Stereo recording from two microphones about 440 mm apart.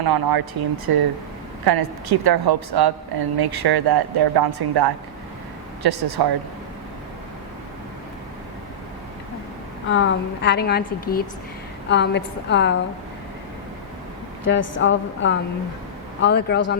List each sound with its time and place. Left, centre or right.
0.0 s a woman's voice: right
9.9 s a woman's voice: left
14.4 s a woman's voice: left